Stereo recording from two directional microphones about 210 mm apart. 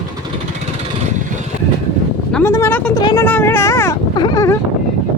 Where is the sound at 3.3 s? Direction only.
10° left (ahead or behind).